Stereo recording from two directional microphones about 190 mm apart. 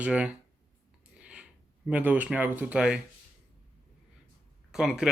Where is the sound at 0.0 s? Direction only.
5° right (ahead or behind).